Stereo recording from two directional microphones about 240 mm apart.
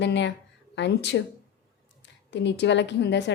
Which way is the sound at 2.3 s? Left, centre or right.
Left.